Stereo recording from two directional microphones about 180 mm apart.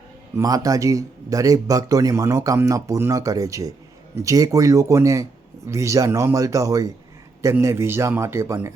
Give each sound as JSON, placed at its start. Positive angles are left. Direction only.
{"t": 0.3, "sound": "a man's voice", "side_deg": -20}